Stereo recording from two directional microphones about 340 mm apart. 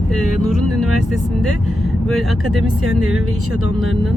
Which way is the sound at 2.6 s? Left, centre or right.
Right.